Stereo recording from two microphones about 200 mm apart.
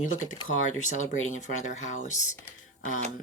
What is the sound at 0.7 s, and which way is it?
Speech, 40° left (ahead or behind).